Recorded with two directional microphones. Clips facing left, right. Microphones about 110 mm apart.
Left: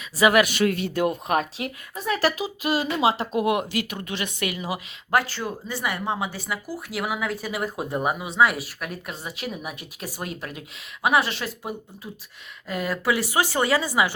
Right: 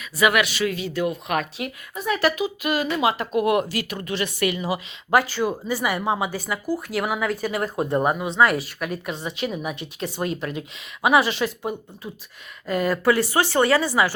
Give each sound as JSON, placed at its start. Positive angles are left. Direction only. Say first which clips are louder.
{"t": 0.0, "sound": "speech", "louder": "left 2 dB", "side_deg": 30}
{"t": 0.4, "sound": "speech", "louder": "left 2 dB", "side_deg": 50}
{"t": 1.3, "sound": "speech", "louder": "left 1 dB", "side_deg": 30}
{"t": 5.1, "sound": "speech", "louder": "right 4 dB", "side_deg": 0}